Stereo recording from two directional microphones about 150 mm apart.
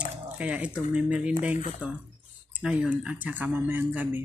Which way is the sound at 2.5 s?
10° right (ahead or behind).